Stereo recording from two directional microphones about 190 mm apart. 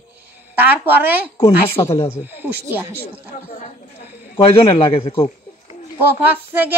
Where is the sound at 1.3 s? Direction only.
20° left (ahead or behind).